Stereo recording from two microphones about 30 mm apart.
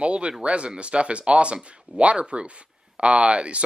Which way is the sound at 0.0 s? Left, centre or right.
Right.